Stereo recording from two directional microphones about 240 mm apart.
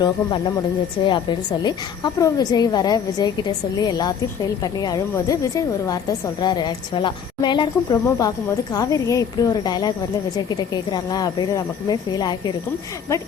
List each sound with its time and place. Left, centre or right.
0.0 s a woman's voice: centre